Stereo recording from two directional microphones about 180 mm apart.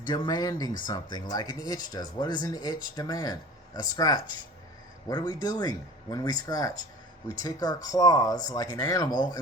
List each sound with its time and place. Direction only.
0.0 s speech: 25° left (ahead or behind)